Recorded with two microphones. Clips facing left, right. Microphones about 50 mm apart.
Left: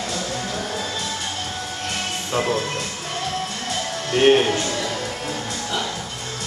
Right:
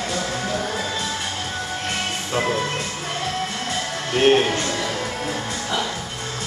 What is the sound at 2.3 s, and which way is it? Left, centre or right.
Speech, centre.